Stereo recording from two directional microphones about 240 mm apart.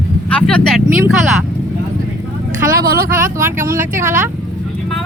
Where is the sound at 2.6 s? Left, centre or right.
Right.